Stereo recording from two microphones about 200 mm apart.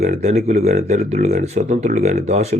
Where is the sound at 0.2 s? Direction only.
35° right (ahead or behind).